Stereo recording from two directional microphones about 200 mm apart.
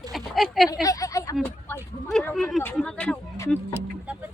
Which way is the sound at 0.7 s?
15° left (ahead or behind).